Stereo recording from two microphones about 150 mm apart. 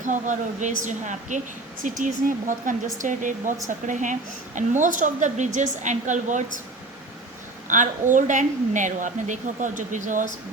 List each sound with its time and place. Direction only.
0.0 s a woman's voice: 55° right (ahead or behind)
7.7 s a woman's voice: 55° right (ahead or behind)